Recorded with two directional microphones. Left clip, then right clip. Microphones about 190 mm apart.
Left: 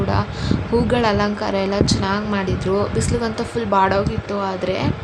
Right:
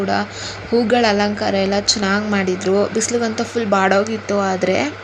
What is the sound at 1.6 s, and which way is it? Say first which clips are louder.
Speech: right 2 dB; 20° left (ahead or behind).